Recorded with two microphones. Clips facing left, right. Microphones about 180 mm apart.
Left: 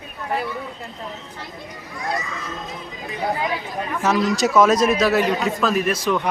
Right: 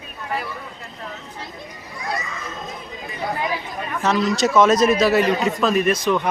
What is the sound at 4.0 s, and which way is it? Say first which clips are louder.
A man's voice: even; centre (ahead or behind).